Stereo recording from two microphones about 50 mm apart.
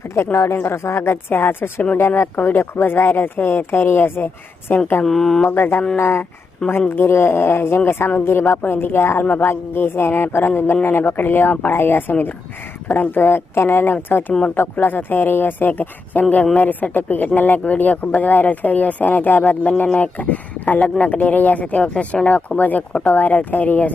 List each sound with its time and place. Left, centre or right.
0.5 s speech: left
5.0 s speech: centre
5.5 s speech: left